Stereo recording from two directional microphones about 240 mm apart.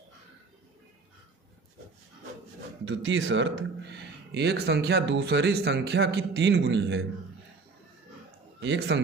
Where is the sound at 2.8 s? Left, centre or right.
Right.